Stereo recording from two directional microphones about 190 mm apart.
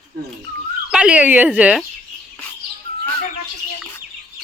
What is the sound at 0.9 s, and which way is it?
Speech, 5° right (ahead or behind).